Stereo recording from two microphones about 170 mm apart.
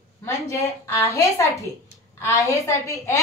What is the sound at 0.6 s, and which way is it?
A woman's voice, 20° left (ahead or behind).